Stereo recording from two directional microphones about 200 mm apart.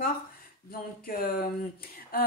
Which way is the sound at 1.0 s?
45° left (ahead or behind).